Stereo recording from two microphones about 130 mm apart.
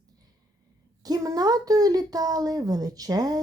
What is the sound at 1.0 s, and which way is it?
A woman's voice, 30° right (ahead or behind).